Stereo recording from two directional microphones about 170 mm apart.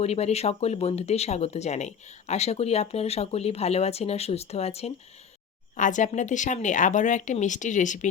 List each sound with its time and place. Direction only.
0.0 s speech: 40° left (ahead or behind)
5.7 s speech: 50° left (ahead or behind)